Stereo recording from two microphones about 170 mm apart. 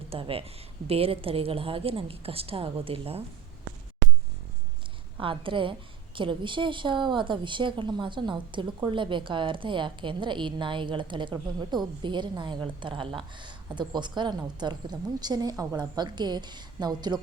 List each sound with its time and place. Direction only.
0.1 s a woman's voice: 35° right (ahead or behind)
5.2 s a woman's voice: 30° right (ahead or behind)